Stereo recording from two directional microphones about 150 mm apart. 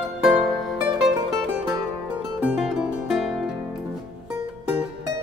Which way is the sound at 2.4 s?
5° right (ahead or behind).